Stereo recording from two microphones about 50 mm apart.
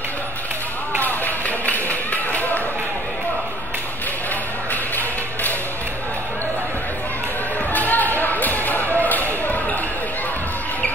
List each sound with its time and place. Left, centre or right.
1.0 s music: left
7.7 s a sound: left
9.0 s basketball bounce: left